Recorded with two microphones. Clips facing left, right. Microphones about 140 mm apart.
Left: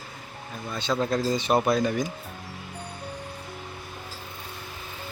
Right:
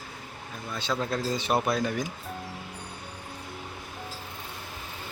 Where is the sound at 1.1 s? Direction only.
5° right (ahead or behind).